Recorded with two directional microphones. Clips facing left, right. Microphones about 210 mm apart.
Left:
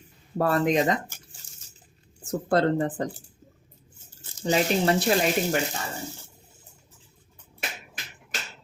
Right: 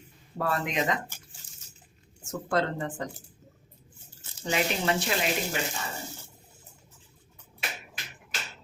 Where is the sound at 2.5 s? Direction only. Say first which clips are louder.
Left 6 dB; 35° left (ahead or behind).